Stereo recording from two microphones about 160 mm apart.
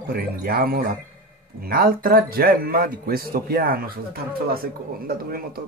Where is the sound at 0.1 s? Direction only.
70° right (ahead or behind).